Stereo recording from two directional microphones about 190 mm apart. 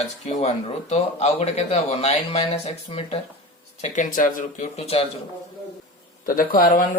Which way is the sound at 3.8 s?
45° left (ahead or behind).